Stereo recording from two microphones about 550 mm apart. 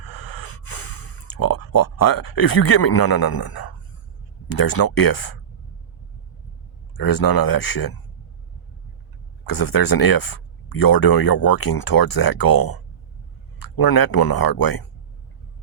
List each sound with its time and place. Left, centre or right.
0.0 s gasp: left
4.4 s speech: left
6.9 s speech: left
9.5 s speech: left
13.7 s speech: left